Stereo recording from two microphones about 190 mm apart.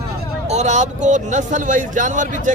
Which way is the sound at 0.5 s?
40° right (ahead or behind).